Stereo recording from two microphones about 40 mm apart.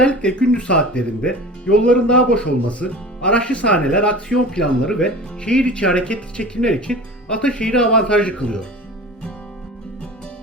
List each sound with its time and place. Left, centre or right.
0.0 s speech: left
2.6 s speech: left